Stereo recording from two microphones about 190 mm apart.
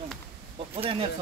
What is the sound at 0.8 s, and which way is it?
Speech, 30° right (ahead or behind).